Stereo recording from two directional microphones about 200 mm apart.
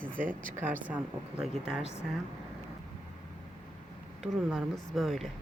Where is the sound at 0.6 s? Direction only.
5° right (ahead or behind).